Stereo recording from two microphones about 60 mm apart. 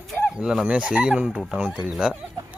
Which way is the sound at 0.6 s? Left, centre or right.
Right.